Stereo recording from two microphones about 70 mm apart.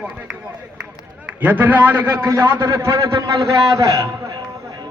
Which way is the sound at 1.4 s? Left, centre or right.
Right.